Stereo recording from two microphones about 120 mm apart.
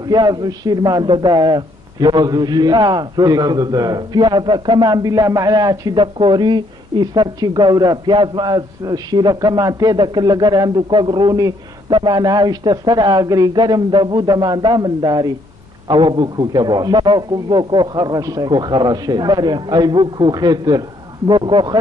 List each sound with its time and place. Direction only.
0.0 s a woman's voice: 35° right (ahead or behind)
5.9 s a woman's voice: 45° right (ahead or behind)